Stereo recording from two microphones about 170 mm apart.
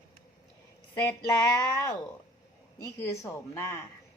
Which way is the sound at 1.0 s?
20° left (ahead or behind).